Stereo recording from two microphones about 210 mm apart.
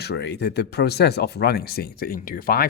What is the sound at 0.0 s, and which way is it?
Speech, 55° left (ahead or behind).